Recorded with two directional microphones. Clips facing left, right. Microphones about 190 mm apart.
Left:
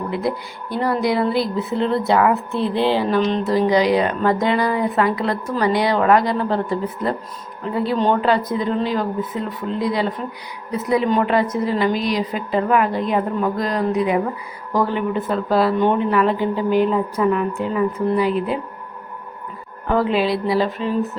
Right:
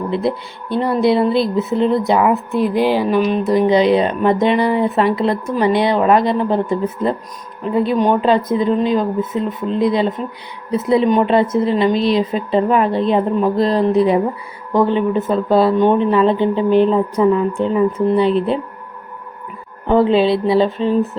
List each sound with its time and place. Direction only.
0.1 s speech: 25° right (ahead or behind)
19.9 s speech: 25° right (ahead or behind)